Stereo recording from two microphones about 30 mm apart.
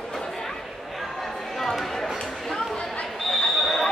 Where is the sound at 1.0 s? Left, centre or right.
Centre.